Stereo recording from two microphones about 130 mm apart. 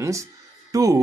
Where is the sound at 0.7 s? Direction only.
25° right (ahead or behind).